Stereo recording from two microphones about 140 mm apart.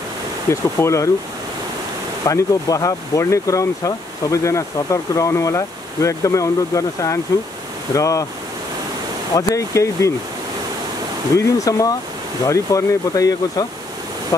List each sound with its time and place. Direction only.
0.5 s speech: 20° left (ahead or behind)
2.2 s speech: 25° left (ahead or behind)
9.3 s speech: 25° left (ahead or behind)
11.3 s speech: 25° left (ahead or behind)